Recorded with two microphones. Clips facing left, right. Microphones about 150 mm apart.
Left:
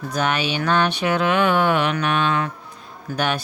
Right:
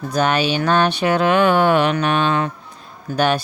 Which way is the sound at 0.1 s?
35° right (ahead or behind).